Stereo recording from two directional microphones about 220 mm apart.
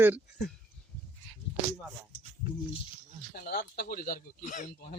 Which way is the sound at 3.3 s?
45° left (ahead or behind).